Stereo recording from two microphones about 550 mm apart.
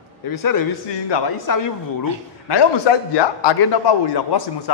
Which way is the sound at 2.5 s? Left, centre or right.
Left.